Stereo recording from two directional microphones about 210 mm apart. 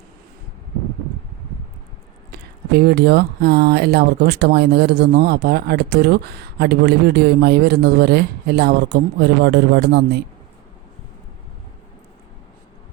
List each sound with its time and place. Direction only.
2.3 s speech: 50° right (ahead or behind)